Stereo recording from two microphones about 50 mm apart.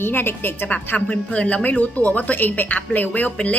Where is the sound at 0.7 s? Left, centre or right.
Left.